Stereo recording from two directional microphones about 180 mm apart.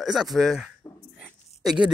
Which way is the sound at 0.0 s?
Centre (ahead or behind).